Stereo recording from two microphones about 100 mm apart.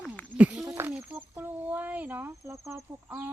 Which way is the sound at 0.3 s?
15° right (ahead or behind).